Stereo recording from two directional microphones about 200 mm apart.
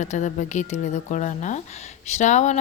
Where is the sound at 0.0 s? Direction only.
35° left (ahead or behind).